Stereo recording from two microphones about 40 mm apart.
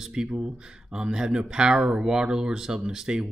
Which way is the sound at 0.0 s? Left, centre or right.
Centre.